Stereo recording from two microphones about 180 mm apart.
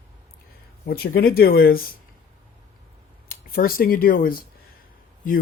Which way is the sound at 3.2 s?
55° left (ahead or behind).